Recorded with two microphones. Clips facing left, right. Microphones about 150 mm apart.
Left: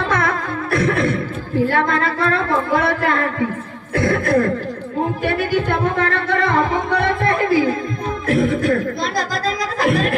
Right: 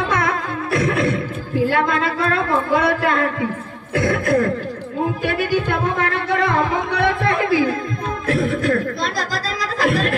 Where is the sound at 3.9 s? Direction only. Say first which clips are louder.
Left 1 dB; 50° left (ahead or behind).